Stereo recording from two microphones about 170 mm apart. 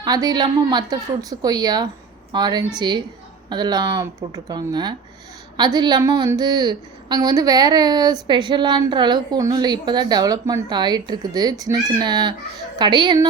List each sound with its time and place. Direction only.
0.0 s a woman's voice: 25° right (ahead or behind)